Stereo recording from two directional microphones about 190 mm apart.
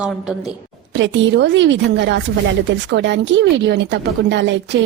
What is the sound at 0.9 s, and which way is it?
A woman's voice, 70° right (ahead or behind).